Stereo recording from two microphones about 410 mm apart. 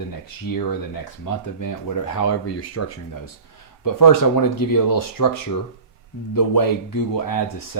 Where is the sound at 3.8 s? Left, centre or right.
Left.